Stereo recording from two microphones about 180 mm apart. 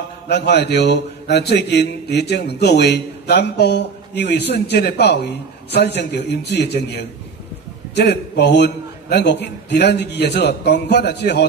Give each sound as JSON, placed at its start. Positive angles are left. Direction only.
{"t": 0.3, "sound": "a man's voice", "side_deg": 70}